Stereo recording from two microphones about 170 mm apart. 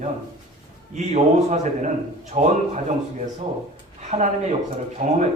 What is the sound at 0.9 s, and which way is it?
A man's voice, 45° right (ahead or behind).